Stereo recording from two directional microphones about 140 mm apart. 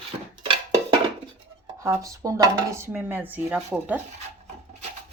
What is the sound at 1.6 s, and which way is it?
Speech, 25° right (ahead or behind).